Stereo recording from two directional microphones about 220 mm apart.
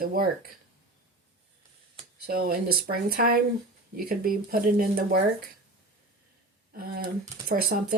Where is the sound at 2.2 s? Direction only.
45° right (ahead or behind).